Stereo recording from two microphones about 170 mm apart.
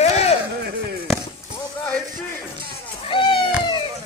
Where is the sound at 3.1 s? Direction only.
30° left (ahead or behind).